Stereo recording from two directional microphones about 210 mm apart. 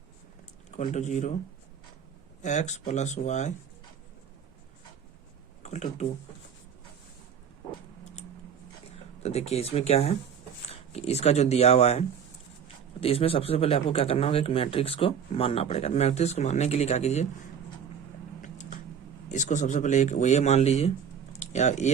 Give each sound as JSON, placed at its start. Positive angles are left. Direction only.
{"t": 0.8, "sound": "speech", "side_deg": 35}
{"t": 2.4, "sound": "speech", "side_deg": 35}
{"t": 5.6, "sound": "speech", "side_deg": 30}
{"t": 9.2, "sound": "speech", "side_deg": 30}
{"t": 19.3, "sound": "speech", "side_deg": 35}